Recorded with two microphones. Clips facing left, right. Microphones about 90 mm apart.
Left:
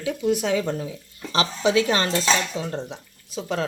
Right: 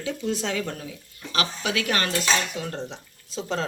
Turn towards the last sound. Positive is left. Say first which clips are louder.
# left 2 dB
turn(degrees=5)  # may be behind; listen again after turning